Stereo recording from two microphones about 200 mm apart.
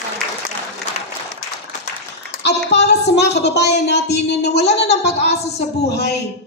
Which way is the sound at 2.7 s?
55° left (ahead or behind).